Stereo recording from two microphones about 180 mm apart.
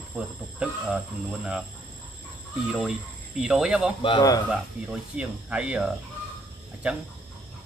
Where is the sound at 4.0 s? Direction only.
25° left (ahead or behind).